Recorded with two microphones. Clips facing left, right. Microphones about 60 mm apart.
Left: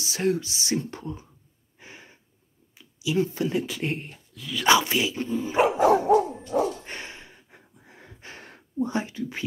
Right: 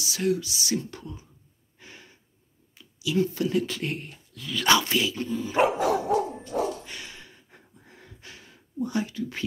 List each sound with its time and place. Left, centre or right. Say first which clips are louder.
0.0 s speech: left 1 dB; left
1.8 s gasp: left 2 dB; left
2.7 s speech: left 1 dB; centre
4.3 s speech: right 1 dB; centre
4.6 s speech: left 2 dB; centre
6.8 s dog: left 3 dB; left
7.4 s gasp: left 1 dB; centre
8.4 s a sound: left 6 dB; left
8.7 s speech: left 1 dB; left